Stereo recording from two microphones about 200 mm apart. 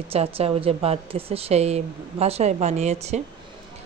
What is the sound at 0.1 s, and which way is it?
Speech, 30° right (ahead or behind).